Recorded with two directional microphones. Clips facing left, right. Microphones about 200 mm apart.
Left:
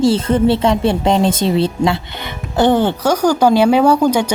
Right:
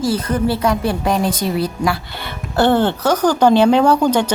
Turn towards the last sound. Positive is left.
turn(degrees=10)  # may be behind; listen again after turning